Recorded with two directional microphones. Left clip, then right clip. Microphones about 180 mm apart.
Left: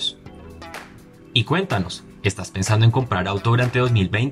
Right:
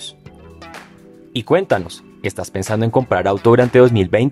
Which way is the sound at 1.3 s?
45° right (ahead or behind).